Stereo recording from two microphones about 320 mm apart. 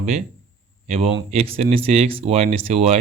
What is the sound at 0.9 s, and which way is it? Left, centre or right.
Speech, centre.